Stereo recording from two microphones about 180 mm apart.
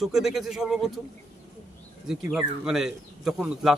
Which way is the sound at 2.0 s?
5° right (ahead or behind).